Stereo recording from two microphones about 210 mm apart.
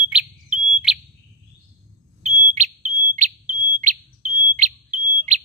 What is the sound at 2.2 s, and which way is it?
Smoke detector, 35° right (ahead or behind).